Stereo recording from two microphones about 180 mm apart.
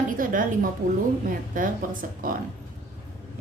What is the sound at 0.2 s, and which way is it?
A woman's voice, 50° right (ahead or behind).